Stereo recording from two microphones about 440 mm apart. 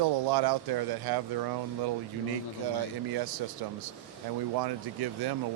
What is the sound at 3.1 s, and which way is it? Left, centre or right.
Speech, right.